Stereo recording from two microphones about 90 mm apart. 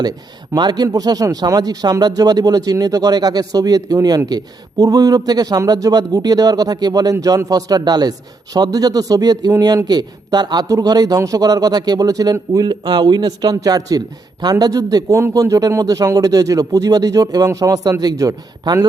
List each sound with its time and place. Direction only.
0.5 s a man's voice: 50° right (ahead or behind)